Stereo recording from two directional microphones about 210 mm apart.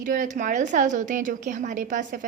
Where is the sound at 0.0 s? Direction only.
40° right (ahead or behind).